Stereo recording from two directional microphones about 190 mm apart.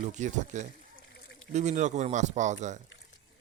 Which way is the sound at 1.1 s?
65° left (ahead or behind).